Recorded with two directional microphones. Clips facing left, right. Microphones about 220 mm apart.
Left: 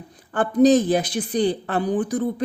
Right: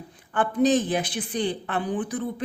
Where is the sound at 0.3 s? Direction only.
40° left (ahead or behind).